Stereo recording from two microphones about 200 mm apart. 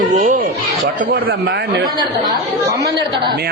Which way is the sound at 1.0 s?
50° right (ahead or behind).